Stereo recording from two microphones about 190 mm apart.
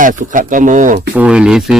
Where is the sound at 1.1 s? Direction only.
5° right (ahead or behind).